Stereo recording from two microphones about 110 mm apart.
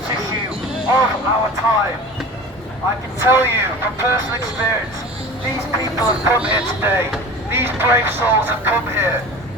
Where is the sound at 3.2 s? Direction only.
20° right (ahead or behind).